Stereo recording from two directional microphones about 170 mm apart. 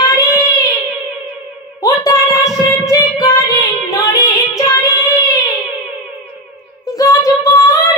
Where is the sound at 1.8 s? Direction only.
20° left (ahead or behind).